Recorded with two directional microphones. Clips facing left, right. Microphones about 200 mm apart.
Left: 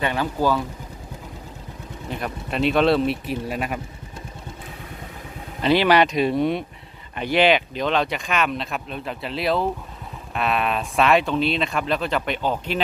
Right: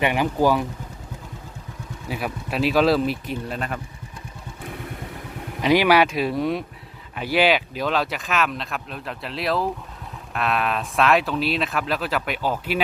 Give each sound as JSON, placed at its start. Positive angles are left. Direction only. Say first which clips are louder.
{"t": 0.0, "sound": "speech", "louder": "right 2 dB", "side_deg": -15}
{"t": 2.0, "sound": "speech", "louder": "right 1 dB", "side_deg": -5}
{"t": 5.6, "sound": "speech", "louder": "even", "side_deg": -10}